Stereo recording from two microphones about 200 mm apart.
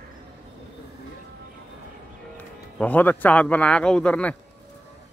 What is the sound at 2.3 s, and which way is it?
A man's voice, 10° left (ahead or behind).